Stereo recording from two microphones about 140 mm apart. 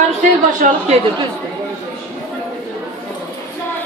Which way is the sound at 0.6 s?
70° right (ahead or behind).